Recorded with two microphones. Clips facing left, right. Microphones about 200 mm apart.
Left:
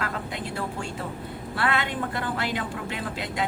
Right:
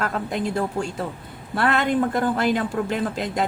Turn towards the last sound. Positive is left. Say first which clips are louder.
# right 6 dB
turn(degrees=-45)  # may be behind; listen again after turning